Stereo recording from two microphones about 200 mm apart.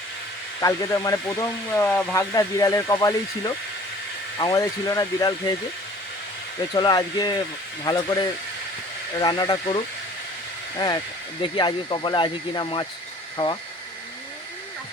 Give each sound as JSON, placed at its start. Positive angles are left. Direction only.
{"t": 0.6, "sound": "speech", "side_deg": 20}
{"t": 6.7, "sound": "speech", "side_deg": 20}
{"t": 9.1, "sound": "speech", "side_deg": 20}